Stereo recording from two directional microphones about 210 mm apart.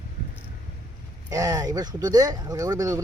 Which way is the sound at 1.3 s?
15° right (ahead or behind).